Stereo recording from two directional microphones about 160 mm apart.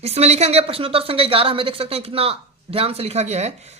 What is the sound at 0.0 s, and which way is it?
A woman's voice, 40° right (ahead or behind).